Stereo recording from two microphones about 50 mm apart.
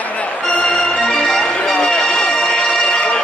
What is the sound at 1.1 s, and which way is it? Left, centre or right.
Music, centre.